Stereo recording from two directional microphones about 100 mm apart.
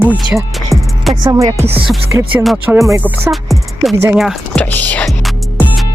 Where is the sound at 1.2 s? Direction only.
35° right (ahead or behind).